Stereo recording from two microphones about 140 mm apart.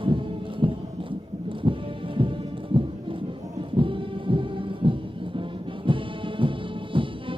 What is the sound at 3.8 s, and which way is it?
Music, 40° right (ahead or behind).